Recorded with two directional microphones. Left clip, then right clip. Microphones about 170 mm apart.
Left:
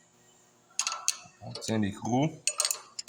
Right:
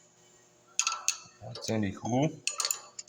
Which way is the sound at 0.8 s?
20° left (ahead or behind).